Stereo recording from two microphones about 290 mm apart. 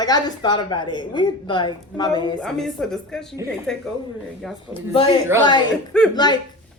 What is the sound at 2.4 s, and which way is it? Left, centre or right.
A woman's voice, centre.